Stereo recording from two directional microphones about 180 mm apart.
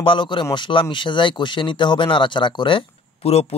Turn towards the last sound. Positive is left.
turn(degrees=30)  # may be behind; listen again after turning